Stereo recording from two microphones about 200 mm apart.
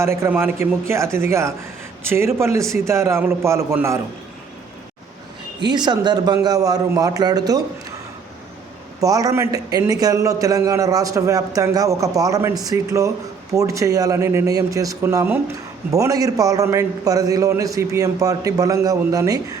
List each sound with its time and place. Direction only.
0.0 s a man's voice: 15° right (ahead or behind)
5.6 s a man's voice: 20° right (ahead or behind)
9.0 s a man's voice: 20° right (ahead or behind)